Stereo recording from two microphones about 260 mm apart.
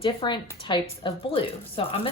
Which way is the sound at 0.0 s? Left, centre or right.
Centre.